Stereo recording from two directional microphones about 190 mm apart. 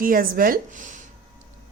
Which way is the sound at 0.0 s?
50° right (ahead or behind).